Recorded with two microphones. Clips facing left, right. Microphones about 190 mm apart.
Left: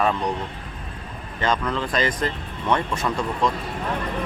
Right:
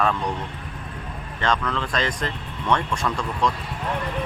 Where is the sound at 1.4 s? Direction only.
5° left (ahead or behind).